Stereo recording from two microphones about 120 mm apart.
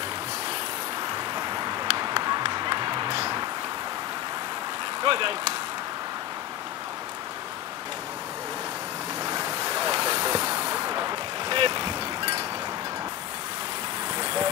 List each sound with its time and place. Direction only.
1.1 s run: 35° right (ahead or behind)
5.0 s speech: 45° right (ahead or behind)
9.2 s vehicle: 35° right (ahead or behind)
14.1 s vehicle: 45° right (ahead or behind)